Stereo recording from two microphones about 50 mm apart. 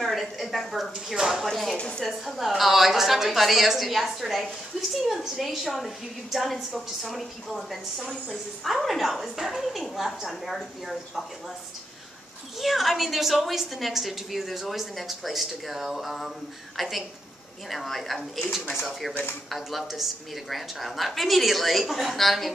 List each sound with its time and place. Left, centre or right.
0.0 s speech: centre
1.5 s a woman's voice: centre
1.8 s a woman's voice: centre
2.0 s a woman's voice: centre
12.5 s a woman's voice: centre